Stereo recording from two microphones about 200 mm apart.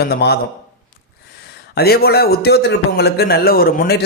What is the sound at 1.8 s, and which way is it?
A man's voice, 50° left (ahead or behind).